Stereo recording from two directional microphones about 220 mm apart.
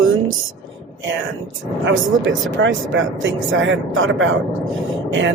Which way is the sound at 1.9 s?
60° right (ahead or behind).